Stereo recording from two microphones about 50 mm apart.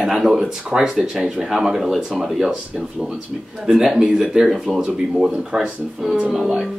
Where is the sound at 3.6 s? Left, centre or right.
Centre.